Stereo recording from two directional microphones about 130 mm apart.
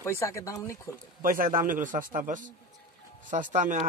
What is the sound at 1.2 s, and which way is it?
A man's voice, 90° right.